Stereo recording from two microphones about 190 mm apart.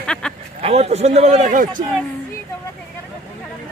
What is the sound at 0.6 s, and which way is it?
A man's voice, 35° right (ahead or behind).